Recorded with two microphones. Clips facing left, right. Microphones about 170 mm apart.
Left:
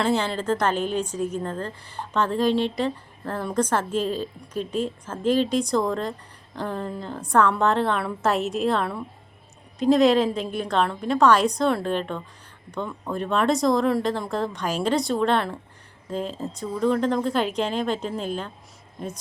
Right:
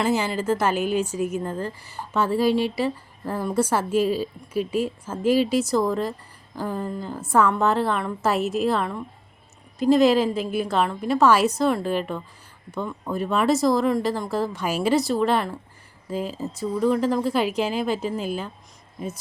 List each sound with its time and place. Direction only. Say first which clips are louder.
0.0 s speech: right 1 dB; 5° right (ahead or behind)